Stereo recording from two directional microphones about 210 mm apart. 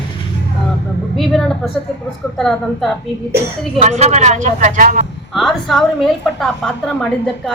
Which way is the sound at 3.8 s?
30° right (ahead or behind).